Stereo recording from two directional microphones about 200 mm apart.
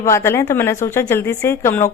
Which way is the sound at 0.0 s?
15° left (ahead or behind).